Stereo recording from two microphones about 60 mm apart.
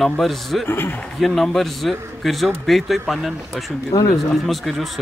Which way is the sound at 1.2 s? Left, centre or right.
Centre.